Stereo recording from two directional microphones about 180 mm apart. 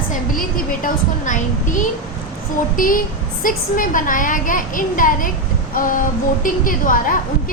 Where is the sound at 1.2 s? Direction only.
45° left (ahead or behind).